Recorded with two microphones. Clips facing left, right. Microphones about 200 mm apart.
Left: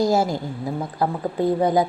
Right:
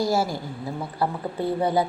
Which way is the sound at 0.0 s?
20° left (ahead or behind).